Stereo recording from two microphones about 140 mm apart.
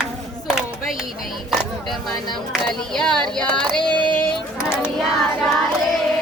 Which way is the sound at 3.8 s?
35° left (ahead or behind).